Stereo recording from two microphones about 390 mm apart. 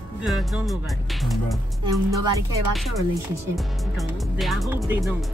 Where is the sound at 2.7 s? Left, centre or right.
Centre.